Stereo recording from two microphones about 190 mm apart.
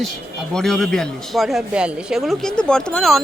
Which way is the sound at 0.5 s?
Centre (ahead or behind).